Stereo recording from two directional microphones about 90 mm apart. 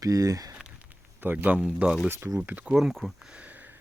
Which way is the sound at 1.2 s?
25° right (ahead or behind).